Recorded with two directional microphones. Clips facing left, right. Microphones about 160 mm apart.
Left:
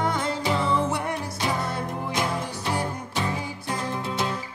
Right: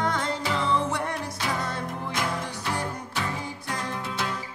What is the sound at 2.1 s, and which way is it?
Music, 25° left (ahead or behind).